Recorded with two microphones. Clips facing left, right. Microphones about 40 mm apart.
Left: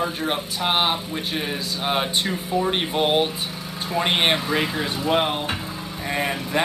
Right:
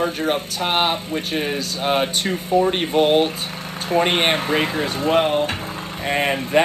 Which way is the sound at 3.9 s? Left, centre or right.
Right.